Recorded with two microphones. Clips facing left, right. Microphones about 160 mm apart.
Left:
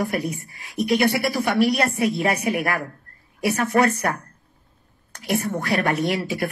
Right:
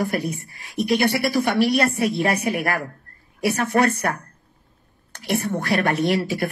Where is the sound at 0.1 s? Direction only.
35° right (ahead or behind).